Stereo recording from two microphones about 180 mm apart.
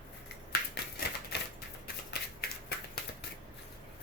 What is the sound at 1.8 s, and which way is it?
Shuffling cards, 60° left (ahead or behind).